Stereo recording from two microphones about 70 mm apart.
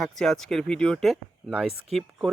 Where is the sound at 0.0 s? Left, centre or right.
Centre.